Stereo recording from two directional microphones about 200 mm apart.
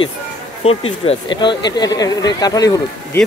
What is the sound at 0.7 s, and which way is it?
Speech, 30° left (ahead or behind).